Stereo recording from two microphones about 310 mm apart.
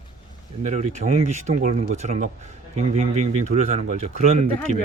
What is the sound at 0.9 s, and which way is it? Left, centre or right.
Speech, right.